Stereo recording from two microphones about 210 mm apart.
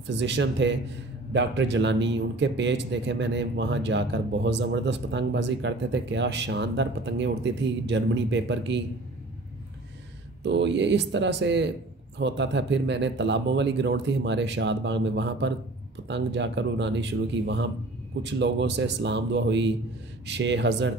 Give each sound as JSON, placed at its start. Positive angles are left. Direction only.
{"t": 0.0, "sound": "a man's voice", "side_deg": -55}
{"t": 10.4, "sound": "a man's voice", "side_deg": -60}